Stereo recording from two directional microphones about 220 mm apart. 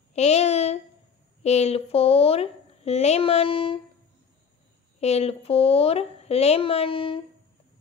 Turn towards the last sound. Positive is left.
turn(degrees=25)  # may be behind; listen again after turning